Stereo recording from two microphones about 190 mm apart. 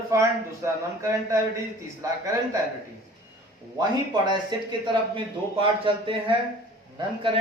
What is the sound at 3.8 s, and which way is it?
Speech, 20° right (ahead or behind).